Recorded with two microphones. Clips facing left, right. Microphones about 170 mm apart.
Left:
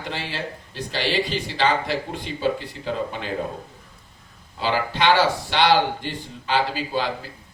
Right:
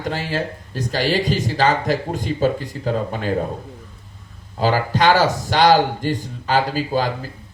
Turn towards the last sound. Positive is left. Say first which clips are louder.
# right 4 dB
turn(degrees=-45)  # may be behind; listen again after turning